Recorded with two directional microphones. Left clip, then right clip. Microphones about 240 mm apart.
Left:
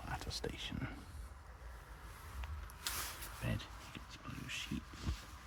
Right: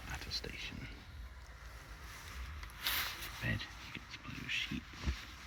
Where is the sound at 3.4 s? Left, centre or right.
Centre.